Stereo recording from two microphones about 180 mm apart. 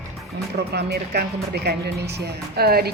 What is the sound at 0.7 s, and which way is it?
Speech, 65° right (ahead or behind).